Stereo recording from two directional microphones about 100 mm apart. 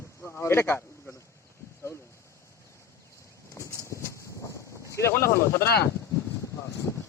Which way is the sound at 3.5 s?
30° left (ahead or behind).